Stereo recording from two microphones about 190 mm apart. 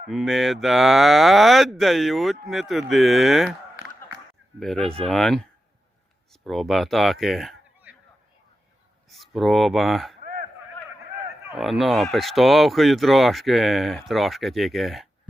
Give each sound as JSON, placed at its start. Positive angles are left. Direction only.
{"t": 0.1, "sound": "speech", "side_deg": 0}
{"t": 4.6, "sound": "speech", "side_deg": 0}
{"t": 9.0, "sound": "speech", "side_deg": 0}
{"t": 10.2, "sound": "a sound", "side_deg": -50}
{"t": 11.5, "sound": "speech", "side_deg": 0}